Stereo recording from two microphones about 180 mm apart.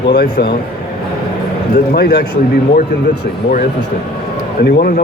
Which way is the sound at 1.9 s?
60° left (ahead or behind).